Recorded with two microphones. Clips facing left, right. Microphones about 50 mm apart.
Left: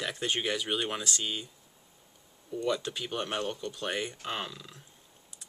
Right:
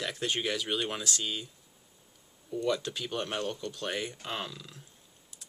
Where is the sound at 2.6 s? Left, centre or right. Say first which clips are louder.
Even; centre.